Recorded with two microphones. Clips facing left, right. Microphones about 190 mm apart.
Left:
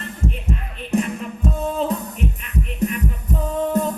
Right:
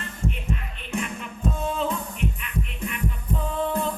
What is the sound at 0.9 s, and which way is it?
Music, 35° left (ahead or behind).